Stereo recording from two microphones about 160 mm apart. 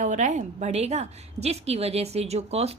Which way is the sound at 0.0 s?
50° right (ahead or behind).